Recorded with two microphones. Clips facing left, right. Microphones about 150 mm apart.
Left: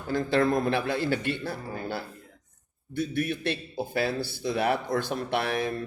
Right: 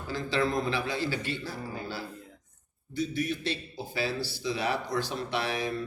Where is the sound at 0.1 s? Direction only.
55° left (ahead or behind).